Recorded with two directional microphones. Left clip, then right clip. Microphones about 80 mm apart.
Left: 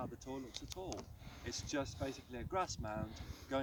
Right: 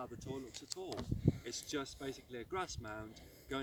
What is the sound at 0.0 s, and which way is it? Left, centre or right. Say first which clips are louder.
Speech: even; centre.